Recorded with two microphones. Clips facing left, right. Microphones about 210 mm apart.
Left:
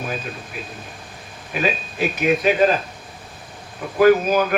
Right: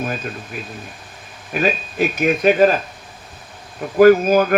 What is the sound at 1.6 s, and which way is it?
Speech, 45° right (ahead or behind).